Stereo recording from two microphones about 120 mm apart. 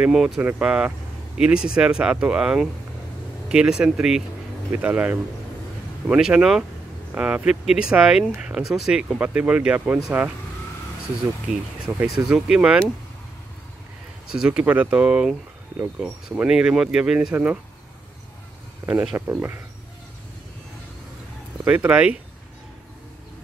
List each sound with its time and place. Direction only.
0.0 s speech: 5° right (ahead or behind)
11.4 s speech: 10° right (ahead or behind)
14.4 s speech: 10° right (ahead or behind)
18.8 s speech: 15° right (ahead or behind)
21.6 s speech: 15° right (ahead or behind)